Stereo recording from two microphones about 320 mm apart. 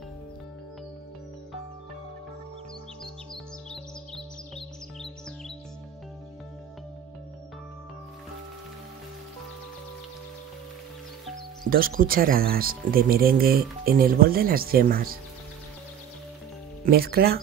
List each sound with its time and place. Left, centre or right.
11.6 s speech: right
16.8 s speech: right